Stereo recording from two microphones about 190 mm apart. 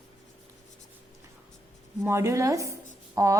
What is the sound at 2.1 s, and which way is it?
A woman's voice, 15° right (ahead or behind).